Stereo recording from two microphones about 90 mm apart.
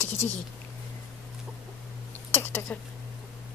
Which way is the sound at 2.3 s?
25° left (ahead or behind).